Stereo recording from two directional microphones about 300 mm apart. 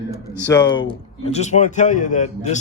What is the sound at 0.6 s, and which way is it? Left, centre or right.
Speech, left.